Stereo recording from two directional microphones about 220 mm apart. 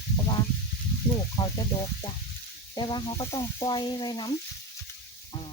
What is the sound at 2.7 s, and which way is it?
Speech, 20° left (ahead or behind).